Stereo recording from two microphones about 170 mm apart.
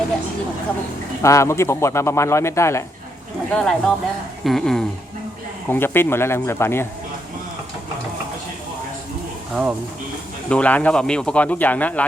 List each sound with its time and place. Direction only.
1.2 s speech: 15° left (ahead or behind)
3.5 s speech: centre (ahead or behind)
10.5 s speech: 10° left (ahead or behind)